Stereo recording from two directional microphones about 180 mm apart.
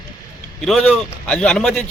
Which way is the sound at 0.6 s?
Centre (ahead or behind).